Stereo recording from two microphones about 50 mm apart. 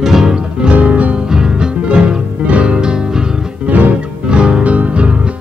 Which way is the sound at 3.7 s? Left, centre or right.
Right.